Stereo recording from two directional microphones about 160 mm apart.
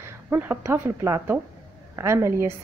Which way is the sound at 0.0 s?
15° right (ahead or behind).